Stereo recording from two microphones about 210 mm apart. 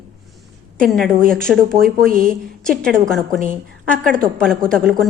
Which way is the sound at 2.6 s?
5° left (ahead or behind).